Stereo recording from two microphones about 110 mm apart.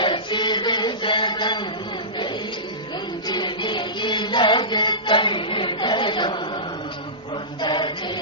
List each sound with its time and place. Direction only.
0.0 s a sound: 45° left (ahead or behind)
3.2 s music: 40° left (ahead or behind)
7.6 s chant: 45° left (ahead or behind)